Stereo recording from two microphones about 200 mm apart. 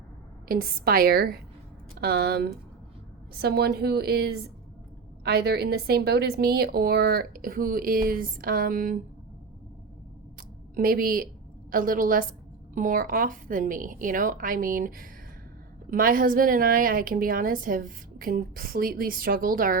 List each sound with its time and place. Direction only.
0.4 s a woman's voice: 45° right (ahead or behind)
10.8 s a woman's voice: 45° right (ahead or behind)